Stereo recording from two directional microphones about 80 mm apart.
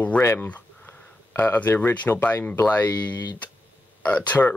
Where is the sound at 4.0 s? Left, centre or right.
Centre.